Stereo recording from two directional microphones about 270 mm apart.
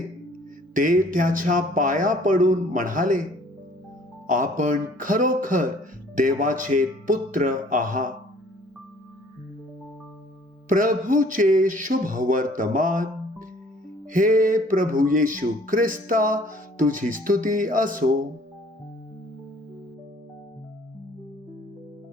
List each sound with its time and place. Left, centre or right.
0.7 s speech: right
4.3 s speech: right
10.7 s speech: right
14.1 s speech: right